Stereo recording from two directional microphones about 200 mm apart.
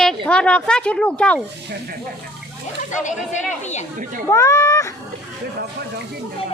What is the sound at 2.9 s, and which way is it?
Speech, 40° left (ahead or behind).